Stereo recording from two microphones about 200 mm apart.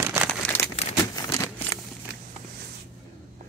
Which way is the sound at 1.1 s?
15° left (ahead or behind).